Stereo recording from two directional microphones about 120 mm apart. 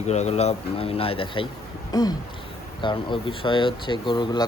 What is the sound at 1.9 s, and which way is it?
Speech, 35° left (ahead or behind).